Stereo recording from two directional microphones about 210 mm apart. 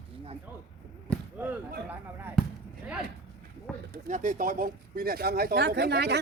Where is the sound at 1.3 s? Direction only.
5° right (ahead or behind).